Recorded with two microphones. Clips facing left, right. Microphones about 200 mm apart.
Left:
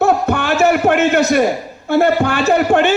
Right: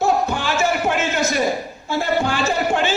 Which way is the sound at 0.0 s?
60° left (ahead or behind).